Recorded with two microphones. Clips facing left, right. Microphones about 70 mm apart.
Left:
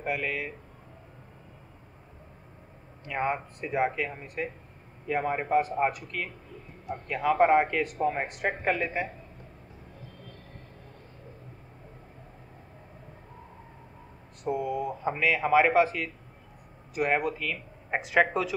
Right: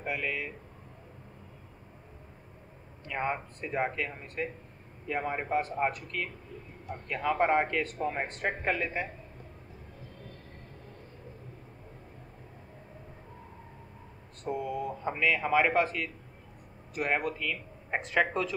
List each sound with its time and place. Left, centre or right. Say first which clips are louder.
0.0 s speech: left 3 dB; centre
3.1 s speech: left 3 dB; centre
14.4 s speech: left 4 dB; centre